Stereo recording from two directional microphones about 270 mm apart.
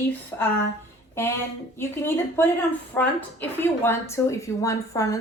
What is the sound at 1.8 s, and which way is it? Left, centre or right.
A woman's voice, centre.